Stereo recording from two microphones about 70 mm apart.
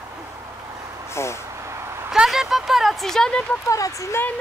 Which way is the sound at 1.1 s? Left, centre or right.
Left.